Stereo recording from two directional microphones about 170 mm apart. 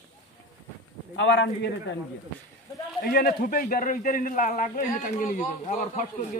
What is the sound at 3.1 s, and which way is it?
A man's voice, 60° left (ahead or behind).